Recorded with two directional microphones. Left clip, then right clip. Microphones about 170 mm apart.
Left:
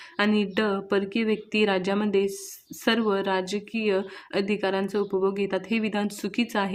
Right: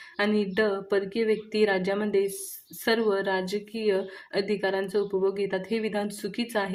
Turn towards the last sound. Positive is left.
turn(degrees=30)  # may be behind; listen again after turning